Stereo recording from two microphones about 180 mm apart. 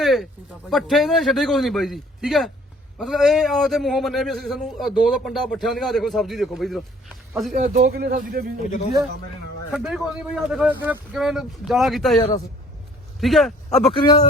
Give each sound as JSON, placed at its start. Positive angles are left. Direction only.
{"t": 0.0, "sound": "a sound", "side_deg": 0}
{"t": 0.7, "sound": "a man's voice", "side_deg": 0}
{"t": 7.5, "sound": "a man's voice", "side_deg": -55}
{"t": 9.7, "sound": "a man's voice", "side_deg": 0}
{"t": 13.9, "sound": "speech", "side_deg": 25}